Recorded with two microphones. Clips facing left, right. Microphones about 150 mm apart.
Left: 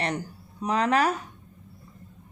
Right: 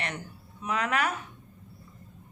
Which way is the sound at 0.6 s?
35° left (ahead or behind).